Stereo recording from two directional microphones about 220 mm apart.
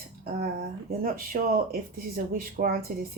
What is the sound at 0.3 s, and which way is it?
Speech, 40° right (ahead or behind).